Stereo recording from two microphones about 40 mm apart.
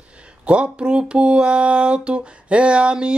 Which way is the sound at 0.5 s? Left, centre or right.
Right.